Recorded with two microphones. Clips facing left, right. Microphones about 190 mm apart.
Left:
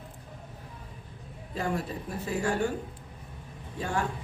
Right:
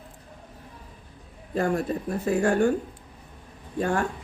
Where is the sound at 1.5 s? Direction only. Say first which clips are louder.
Right 7 dB; 50° right (ahead or behind).